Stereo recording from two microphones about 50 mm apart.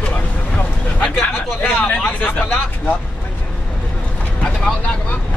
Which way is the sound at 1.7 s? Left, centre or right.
Left.